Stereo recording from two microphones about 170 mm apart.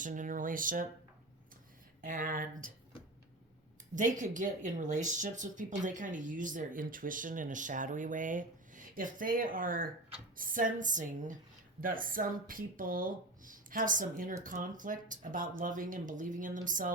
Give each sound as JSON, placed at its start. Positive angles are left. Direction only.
{"t": 0.0, "sound": "speech", "side_deg": -50}
{"t": 2.0, "sound": "speech", "side_deg": -55}
{"t": 3.9, "sound": "speech", "side_deg": -50}